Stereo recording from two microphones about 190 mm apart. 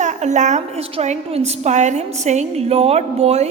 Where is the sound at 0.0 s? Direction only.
40° right (ahead or behind).